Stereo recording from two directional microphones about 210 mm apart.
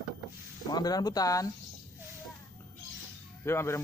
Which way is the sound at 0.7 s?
20° left (ahead or behind).